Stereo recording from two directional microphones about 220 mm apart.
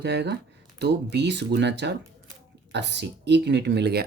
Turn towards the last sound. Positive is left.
turn(degrees=-50)  # may be behind; listen again after turning